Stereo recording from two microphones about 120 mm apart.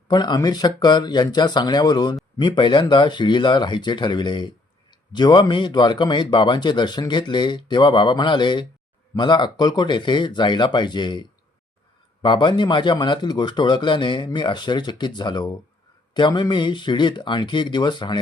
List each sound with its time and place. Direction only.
0.1 s speech: 35° left (ahead or behind)